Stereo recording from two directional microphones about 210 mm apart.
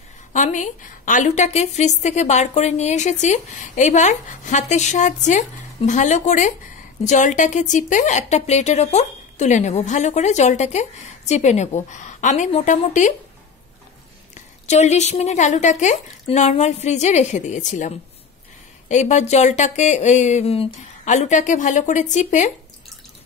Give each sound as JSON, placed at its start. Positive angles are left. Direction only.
{"t": 0.3, "sound": "a woman's voice", "side_deg": 35}
{"t": 14.3, "sound": "a woman's voice", "side_deg": 35}